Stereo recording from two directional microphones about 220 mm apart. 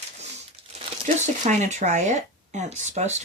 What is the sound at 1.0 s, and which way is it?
Speech, 35° right (ahead or behind).